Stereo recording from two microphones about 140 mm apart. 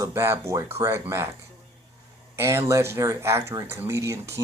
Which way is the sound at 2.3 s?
20° right (ahead or behind).